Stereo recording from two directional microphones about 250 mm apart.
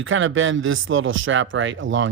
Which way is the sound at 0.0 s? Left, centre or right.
Right.